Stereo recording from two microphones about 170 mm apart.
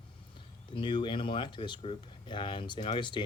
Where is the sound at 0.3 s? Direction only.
30° left (ahead or behind).